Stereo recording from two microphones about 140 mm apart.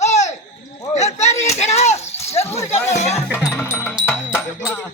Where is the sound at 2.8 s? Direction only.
55° left (ahead or behind).